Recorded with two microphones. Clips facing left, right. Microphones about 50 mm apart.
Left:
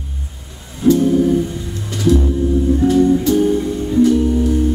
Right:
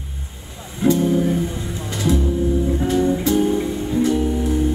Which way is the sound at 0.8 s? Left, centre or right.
Right.